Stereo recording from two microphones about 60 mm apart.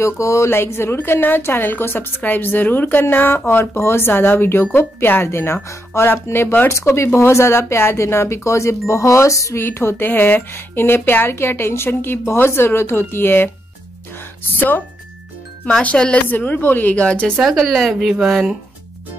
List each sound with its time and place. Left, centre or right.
0.0 s speech: left
0.5 s speech: left
6.7 s speech: left
9.6 s speech: left
15.8 s a woman's voice: centre
16.9 s a woman's voice: left
17.4 s speech: centre